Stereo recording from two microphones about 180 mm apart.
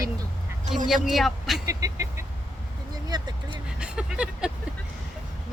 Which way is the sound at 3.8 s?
5° right (ahead or behind).